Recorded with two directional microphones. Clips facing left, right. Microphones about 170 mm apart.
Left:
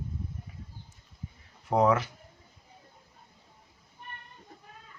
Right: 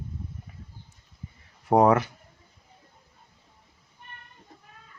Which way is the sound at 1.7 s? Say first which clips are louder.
Right 5 dB; 55° right (ahead or behind).